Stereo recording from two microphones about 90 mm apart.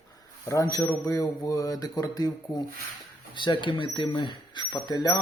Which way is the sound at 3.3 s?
60° left (ahead or behind).